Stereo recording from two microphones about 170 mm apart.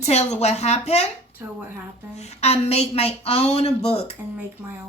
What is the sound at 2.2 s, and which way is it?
A woman's voice, 40° left (ahead or behind).